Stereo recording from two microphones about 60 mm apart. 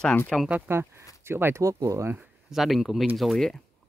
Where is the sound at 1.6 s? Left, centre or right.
Right.